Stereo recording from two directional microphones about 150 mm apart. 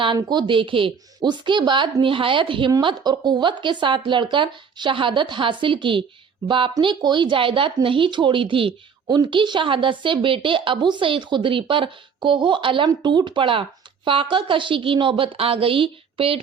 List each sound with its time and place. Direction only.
0.0 s speech: 30° right (ahead or behind)